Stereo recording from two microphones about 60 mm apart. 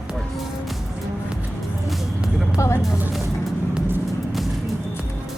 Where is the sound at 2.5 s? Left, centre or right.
Left.